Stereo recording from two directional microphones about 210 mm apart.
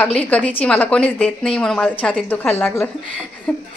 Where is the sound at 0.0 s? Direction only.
5° left (ahead or behind).